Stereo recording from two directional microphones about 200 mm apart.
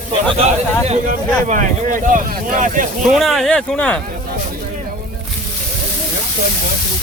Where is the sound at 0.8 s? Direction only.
35° right (ahead or behind).